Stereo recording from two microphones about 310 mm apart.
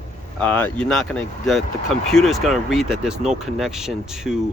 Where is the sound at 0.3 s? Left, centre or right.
Centre.